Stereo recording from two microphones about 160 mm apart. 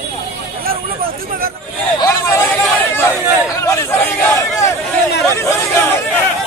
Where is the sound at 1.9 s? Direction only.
20° left (ahead or behind).